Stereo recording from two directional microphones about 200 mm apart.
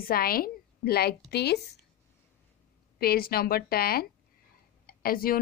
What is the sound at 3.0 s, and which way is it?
A woman's voice, 50° left (ahead or behind).